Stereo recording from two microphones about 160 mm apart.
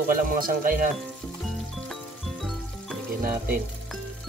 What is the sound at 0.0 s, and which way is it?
Speech, 65° right (ahead or behind).